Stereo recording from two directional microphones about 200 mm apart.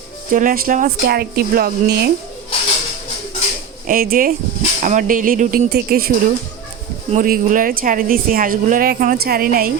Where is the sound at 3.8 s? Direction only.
45° right (ahead or behind).